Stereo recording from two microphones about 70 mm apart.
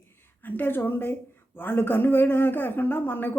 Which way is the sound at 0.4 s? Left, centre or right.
Left.